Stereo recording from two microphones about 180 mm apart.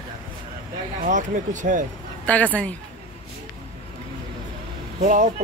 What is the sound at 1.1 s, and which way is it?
Speech, 45° right (ahead or behind).